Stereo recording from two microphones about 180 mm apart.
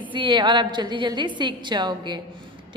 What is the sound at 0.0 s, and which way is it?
A woman's voice, 25° right (ahead or behind).